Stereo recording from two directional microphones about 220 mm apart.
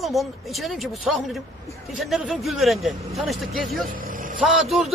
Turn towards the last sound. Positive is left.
turn(degrees=0)  # may be behind; listen again after turning